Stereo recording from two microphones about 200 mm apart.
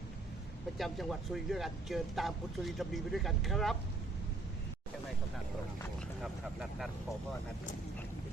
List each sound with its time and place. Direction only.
0.8 s speech: centre (ahead or behind)
6.2 s vehicle: centre (ahead or behind)